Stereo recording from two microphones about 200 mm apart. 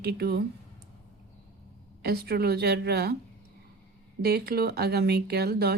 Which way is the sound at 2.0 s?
50° right (ahead or behind).